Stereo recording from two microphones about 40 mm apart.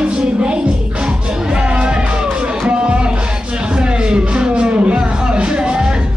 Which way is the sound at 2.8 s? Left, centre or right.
Right.